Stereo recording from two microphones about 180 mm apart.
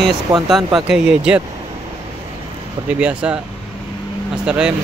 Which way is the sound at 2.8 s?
5° right (ahead or behind).